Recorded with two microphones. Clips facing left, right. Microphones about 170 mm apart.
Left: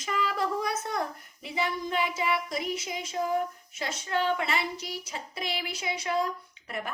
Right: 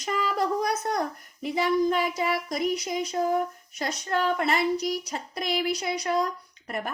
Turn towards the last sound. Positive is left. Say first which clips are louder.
# right 4 dB
turn(degrees=-45)  # may be behind; listen again after turning